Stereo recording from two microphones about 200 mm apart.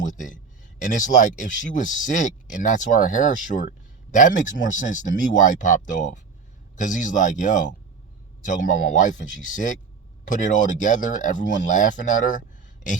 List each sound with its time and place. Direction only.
0.0 s speech: 40° left (ahead or behind)